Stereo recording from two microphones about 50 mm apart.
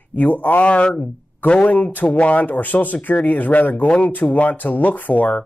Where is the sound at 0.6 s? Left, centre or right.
Left.